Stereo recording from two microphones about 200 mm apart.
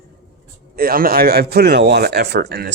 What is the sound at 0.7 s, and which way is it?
A man's voice, 45° right (ahead or behind).